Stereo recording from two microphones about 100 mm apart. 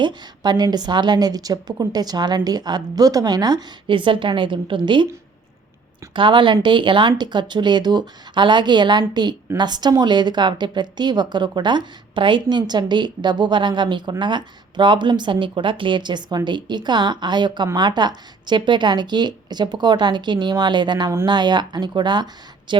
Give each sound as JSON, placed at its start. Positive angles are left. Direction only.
{"t": 0.0, "sound": "a woman's voice", "side_deg": -45}
{"t": 6.1, "sound": "a woman's voice", "side_deg": -55}